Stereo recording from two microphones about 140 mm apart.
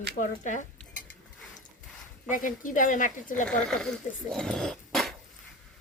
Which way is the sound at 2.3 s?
70° left (ahead or behind).